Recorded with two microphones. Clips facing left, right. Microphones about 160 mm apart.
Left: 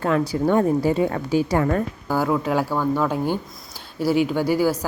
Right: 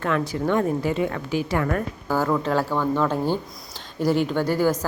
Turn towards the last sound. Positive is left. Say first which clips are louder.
# left 1 dB
turn(degrees=10)  # may be behind; listen again after turning